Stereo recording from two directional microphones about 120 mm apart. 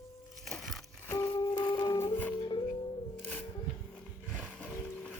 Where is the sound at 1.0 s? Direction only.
20° left (ahead or behind).